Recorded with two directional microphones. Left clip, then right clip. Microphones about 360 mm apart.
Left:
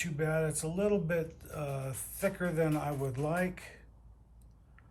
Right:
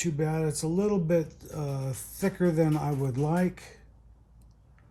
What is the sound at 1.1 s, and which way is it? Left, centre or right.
Speech, centre.